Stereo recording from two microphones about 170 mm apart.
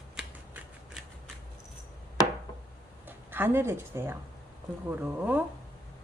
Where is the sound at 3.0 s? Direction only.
10° right (ahead or behind).